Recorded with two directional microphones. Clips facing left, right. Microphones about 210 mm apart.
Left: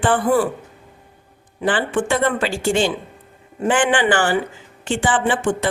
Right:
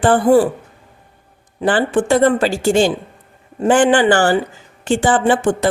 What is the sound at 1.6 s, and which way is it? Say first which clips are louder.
Speech: right 4 dB; 40° right (ahead or behind).